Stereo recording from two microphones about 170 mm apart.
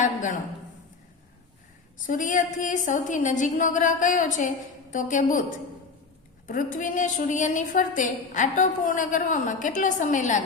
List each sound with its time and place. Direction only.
0.0 s a sound: 45° left (ahead or behind)
2.0 s a woman's voice: 50° left (ahead or behind)
6.5 s a woman's voice: 50° left (ahead or behind)